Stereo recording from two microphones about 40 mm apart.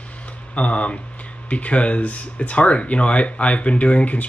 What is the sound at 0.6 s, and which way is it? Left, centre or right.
Speech, left.